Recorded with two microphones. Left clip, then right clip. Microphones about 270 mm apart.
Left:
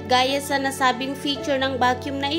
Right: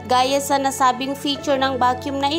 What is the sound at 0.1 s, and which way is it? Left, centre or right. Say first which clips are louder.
A woman's voice: right 3 dB; centre.